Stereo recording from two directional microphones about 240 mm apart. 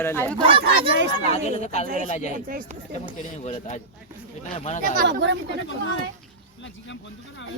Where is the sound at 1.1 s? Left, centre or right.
Left.